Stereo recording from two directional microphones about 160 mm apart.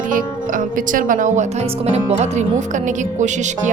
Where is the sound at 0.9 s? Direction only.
55° right (ahead or behind).